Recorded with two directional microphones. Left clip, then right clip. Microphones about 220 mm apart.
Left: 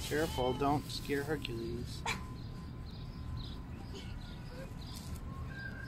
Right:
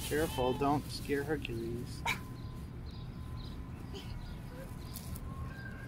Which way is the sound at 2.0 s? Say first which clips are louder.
Right 3 dB; 30° right (ahead or behind).